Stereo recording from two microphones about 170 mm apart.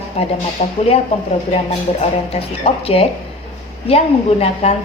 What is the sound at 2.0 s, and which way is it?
A woman's voice, 35° left (ahead or behind).